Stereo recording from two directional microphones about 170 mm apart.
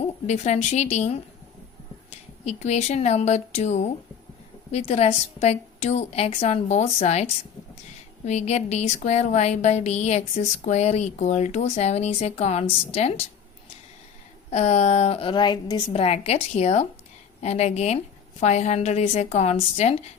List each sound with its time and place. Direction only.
0.3 s speech: 40° left (ahead or behind)
14.5 s speech: 40° left (ahead or behind); by 15.8 s 25° left (ahead or behind)
15.9 s speech: 35° left (ahead or behind)